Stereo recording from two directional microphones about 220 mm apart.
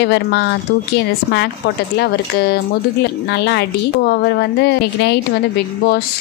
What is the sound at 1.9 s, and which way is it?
Speech, 50° left (ahead or behind).